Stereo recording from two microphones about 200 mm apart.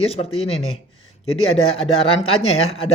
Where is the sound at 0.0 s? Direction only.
30° left (ahead or behind).